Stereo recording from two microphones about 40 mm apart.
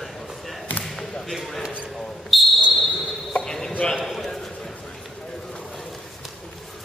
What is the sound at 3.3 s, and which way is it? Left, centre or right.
Chopping, centre.